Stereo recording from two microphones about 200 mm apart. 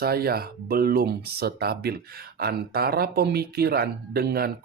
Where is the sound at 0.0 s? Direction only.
50° right (ahead or behind).